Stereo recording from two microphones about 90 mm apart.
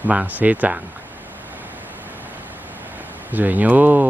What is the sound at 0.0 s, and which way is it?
Speech, 15° right (ahead or behind).